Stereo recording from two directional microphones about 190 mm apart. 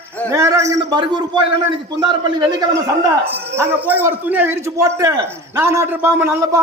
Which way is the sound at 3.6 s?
10° right (ahead or behind).